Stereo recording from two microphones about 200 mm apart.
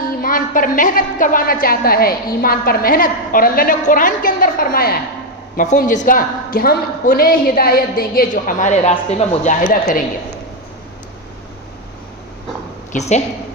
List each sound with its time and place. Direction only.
0.2 s a woman's voice: 45° left (ahead or behind)
12.9 s speech: 35° left (ahead or behind)